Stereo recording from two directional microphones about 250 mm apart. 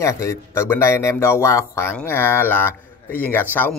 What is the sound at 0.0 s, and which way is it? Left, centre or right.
Speech, centre.